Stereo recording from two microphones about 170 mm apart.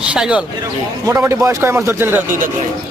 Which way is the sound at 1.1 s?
20° right (ahead or behind).